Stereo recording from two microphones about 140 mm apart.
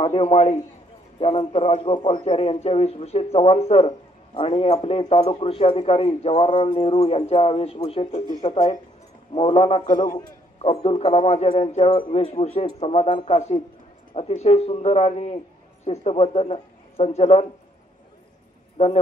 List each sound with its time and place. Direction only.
0.0 s a man's voice: 45° left (ahead or behind)
9.8 s a man's voice: 75° left (ahead or behind)
10.6 s a man's voice: 50° left (ahead or behind)
18.8 s a man's voice: 50° left (ahead or behind)